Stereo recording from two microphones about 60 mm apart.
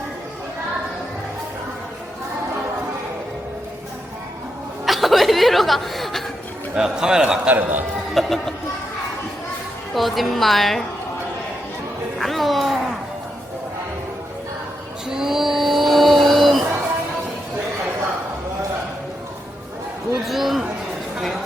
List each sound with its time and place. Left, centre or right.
4.9 s chuckle: centre
6.7 s a man's voice: centre
7.4 s a man's voice: right
8.1 s speech: centre
9.9 s a woman's voice: centre
12.2 s music: centre
15.1 s a sound: centre
20.2 s a sound: centre